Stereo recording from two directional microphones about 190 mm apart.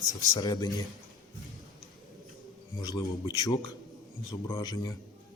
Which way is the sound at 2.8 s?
20° left (ahead or behind).